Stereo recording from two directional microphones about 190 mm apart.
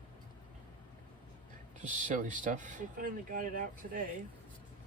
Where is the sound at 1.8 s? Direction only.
40° right (ahead or behind).